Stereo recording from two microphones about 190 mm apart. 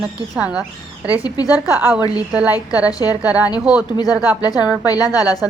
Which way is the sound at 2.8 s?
20° left (ahead or behind).